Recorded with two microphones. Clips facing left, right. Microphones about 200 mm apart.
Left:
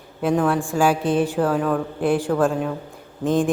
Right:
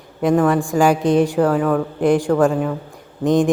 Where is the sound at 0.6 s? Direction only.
15° right (ahead or behind).